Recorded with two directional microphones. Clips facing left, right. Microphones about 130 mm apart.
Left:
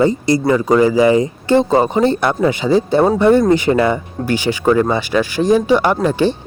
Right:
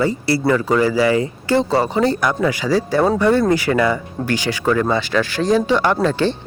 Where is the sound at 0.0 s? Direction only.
20° left (ahead or behind).